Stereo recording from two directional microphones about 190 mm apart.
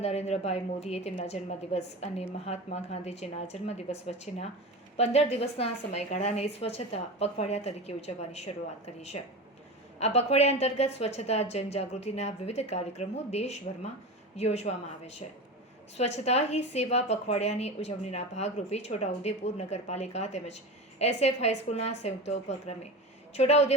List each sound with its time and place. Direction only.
0.0 s a woman's voice: 35° left (ahead or behind)